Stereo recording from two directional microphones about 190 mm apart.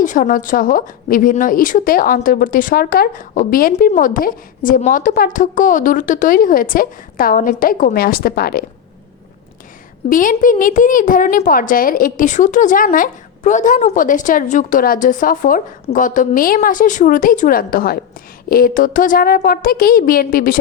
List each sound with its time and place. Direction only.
0.0 s a woman's voice: 45° left (ahead or behind)
10.1 s a woman's voice: 45° left (ahead or behind)